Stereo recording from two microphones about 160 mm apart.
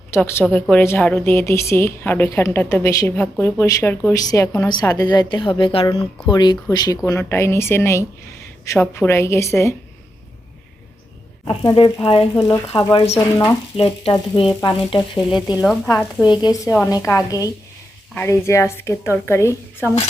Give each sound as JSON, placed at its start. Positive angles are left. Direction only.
{"t": 0.1, "sound": "a woman's voice", "side_deg": 15}
{"t": 5.3, "sound": "frying", "side_deg": 30}
{"t": 6.2, "sound": "a woman's voice", "side_deg": 25}
{"t": 11.4, "sound": "frying", "side_deg": 30}
{"t": 12.3, "sound": "a woman's voice", "side_deg": 25}
{"t": 13.7, "sound": "frying", "side_deg": 40}
{"t": 15.4, "sound": "speech", "side_deg": -5}
{"t": 16.2, "sound": "a woman's voice", "side_deg": 25}